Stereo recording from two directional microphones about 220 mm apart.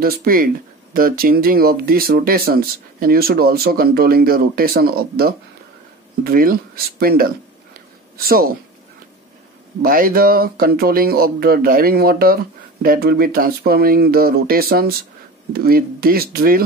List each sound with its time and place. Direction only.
0.0 s speech: 40° right (ahead or behind)
9.8 s speech: 40° right (ahead or behind)